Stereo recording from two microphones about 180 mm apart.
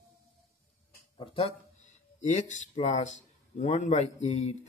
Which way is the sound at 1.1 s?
35° left (ahead or behind).